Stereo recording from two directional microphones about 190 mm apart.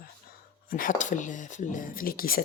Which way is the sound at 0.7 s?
45° left (ahead or behind).